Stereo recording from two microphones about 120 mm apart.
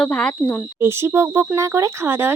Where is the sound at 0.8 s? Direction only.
20° right (ahead or behind).